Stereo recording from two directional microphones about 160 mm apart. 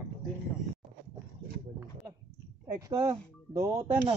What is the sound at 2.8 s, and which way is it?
Speech, 20° right (ahead or behind).